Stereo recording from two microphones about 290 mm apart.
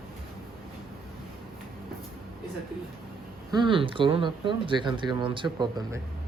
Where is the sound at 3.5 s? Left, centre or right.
Centre.